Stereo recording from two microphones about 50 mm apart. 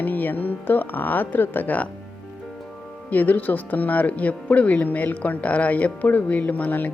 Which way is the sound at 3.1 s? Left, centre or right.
Left.